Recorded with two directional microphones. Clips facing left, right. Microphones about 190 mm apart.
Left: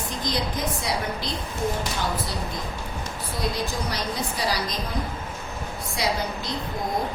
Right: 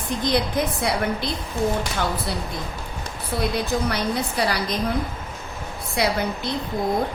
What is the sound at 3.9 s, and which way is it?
Speech, 60° right (ahead or behind).